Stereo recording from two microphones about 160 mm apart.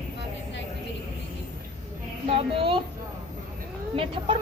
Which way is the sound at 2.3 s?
35° right (ahead or behind).